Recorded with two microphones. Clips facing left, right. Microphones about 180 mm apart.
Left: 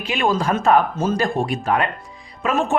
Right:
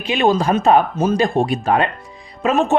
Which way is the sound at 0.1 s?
20° right (ahead or behind).